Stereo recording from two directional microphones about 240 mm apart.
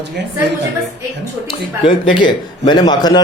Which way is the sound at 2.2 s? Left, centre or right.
Centre.